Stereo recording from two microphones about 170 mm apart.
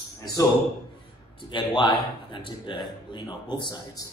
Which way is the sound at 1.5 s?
25° left (ahead or behind).